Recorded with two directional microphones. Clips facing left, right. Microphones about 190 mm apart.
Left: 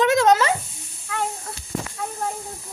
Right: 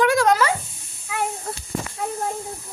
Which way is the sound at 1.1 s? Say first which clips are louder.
Right 1 dB; 10° right (ahead or behind).